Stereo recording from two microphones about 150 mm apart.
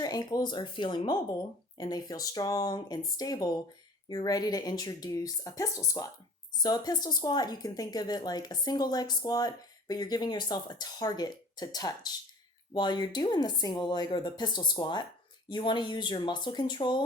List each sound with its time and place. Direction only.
0.0 s speech: 25° left (ahead or behind)